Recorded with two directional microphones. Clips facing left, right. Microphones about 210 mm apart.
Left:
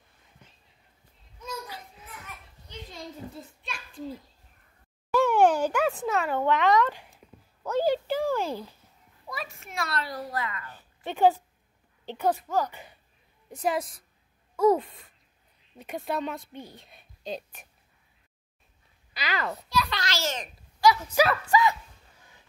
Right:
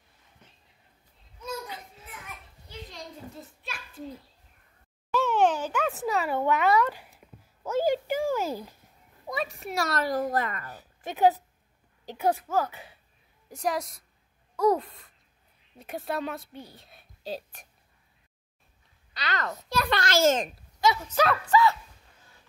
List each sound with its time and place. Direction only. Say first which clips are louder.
3.3 s a sound: left 1 dB; 5° right (ahead or behind)
5.1 s a sound: left 3 dB; 10° left (ahead or behind)
5.9 s speech: left 1 dB; centre (ahead or behind)
9.5 s a woman's voice: right 4 dB; 35° right (ahead or behind)
12.1 s a child's voice: even; 10° right (ahead or behind)
19.1 s speech: left 1 dB; 10° left (ahead or behind)
19.7 s a woman's voice: right 5 dB; 50° right (ahead or behind)
21.1 s speech: even; 10° left (ahead or behind)